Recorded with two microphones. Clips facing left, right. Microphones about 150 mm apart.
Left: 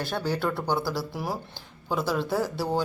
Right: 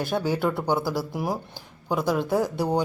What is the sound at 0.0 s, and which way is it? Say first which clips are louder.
Speech: right 3 dB; 15° right (ahead or behind).